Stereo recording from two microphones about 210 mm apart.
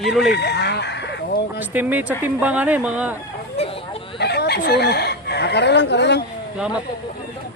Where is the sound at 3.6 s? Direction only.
25° left (ahead or behind).